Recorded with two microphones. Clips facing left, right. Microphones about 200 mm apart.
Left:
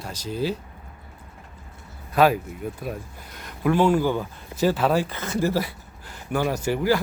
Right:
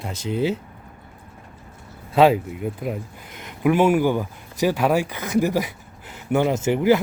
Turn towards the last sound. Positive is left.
turn(degrees=-20)  # may be behind; listen again after turning